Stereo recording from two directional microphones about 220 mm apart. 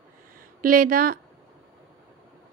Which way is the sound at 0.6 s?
40° right (ahead or behind).